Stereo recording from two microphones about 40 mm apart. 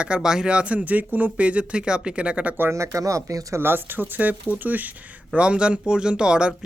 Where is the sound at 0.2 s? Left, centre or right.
Centre.